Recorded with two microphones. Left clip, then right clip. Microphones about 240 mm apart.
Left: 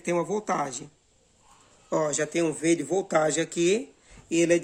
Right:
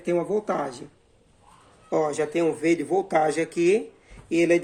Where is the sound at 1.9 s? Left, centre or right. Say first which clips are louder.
Right 2 dB; left.